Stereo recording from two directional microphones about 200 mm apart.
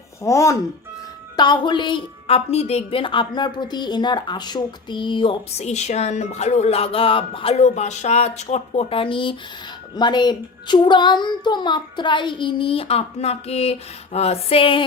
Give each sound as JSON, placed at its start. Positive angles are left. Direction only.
{"t": 0.2, "sound": "a woman's voice", "side_deg": 15}